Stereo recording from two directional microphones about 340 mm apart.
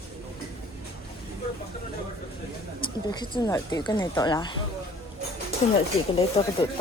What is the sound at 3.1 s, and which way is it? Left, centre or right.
A woman's voice, centre.